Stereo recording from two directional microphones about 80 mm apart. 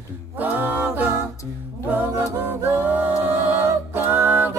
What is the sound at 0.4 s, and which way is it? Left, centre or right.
A capella, right.